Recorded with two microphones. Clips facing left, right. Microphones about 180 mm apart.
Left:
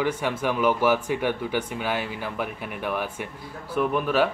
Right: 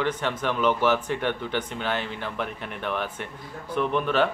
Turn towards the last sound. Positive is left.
turn(degrees=5)  # may be behind; listen again after turning